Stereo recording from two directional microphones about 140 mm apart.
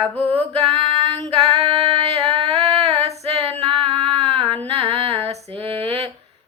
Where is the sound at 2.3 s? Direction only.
45° right (ahead or behind).